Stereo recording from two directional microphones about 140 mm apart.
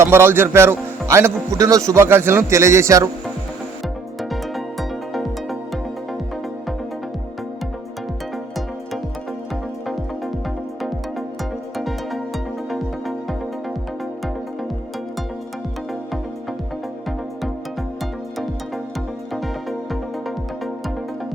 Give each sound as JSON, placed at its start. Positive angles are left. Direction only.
{"t": 0.0, "sound": "a man's voice", "side_deg": -15}
{"t": 4.2, "sound": "music", "side_deg": 0}
{"t": 9.8, "sound": "music", "side_deg": 0}
{"t": 11.8, "sound": "music", "side_deg": 0}